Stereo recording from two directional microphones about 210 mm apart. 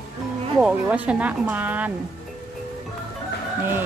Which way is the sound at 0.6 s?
5° right (ahead or behind).